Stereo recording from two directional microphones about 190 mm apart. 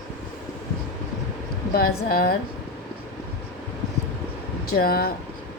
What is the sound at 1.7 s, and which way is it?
Speech, 55° left (ahead or behind).